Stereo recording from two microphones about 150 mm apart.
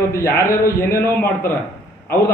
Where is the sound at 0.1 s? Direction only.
20° left (ahead or behind).